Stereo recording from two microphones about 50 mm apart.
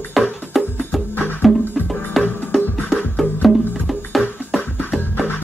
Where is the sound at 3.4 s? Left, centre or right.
Centre.